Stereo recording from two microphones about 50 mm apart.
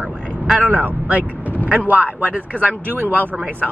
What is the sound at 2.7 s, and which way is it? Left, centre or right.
Speech, right.